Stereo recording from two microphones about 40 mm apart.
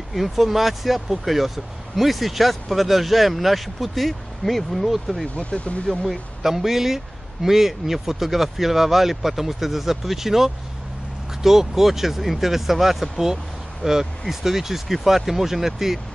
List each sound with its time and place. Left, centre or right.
0.1 s speech: centre
5.3 s speech: left
6.4 s speech: centre